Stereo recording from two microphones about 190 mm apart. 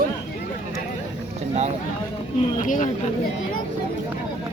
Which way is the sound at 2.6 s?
40° left (ahead or behind).